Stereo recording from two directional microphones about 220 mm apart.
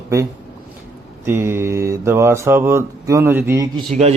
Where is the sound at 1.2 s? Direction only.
10° right (ahead or behind).